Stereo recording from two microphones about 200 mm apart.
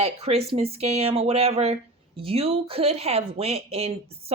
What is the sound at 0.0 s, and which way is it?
Speech, 30° right (ahead or behind).